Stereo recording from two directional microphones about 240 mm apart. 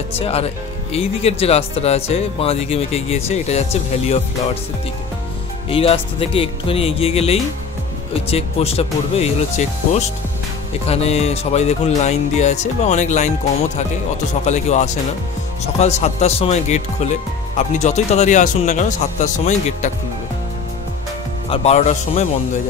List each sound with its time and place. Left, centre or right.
0.2 s speech: left
5.7 s speech: left
14.4 s speech: left
21.5 s speech: left